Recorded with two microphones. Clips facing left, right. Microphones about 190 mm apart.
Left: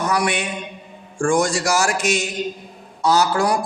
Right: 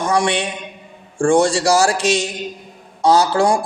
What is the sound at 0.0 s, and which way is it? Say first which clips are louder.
A man's voice: right 3 dB; 25° right (ahead or behind).